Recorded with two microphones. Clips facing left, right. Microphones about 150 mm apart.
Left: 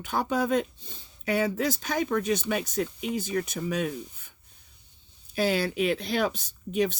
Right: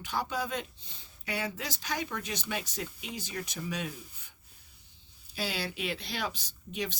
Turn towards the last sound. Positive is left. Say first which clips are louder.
# left 10 dB
turn(degrees=50)  # may be behind; listen again after turning